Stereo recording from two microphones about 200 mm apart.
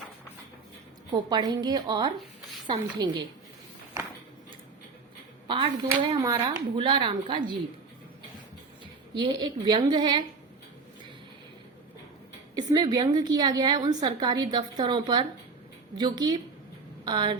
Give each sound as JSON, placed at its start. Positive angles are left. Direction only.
{"t": 1.1, "sound": "a woman's voice", "side_deg": -20}
{"t": 5.5, "sound": "speech", "side_deg": -25}
{"t": 6.7, "sound": "a woman's voice", "side_deg": -25}
{"t": 9.1, "sound": "a woman's voice", "side_deg": -20}
{"t": 12.5, "sound": "a woman's voice", "side_deg": -20}